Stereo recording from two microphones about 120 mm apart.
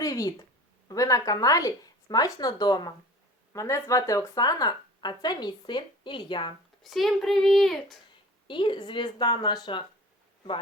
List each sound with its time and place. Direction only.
0.0 s a woman's voice: 30° left (ahead or behind)
3.5 s speech: 25° left (ahead or behind); by 6.5 s 40° left (ahead or behind)
6.8 s speech: centre (ahead or behind)
8.4 s speech: 40° left (ahead or behind)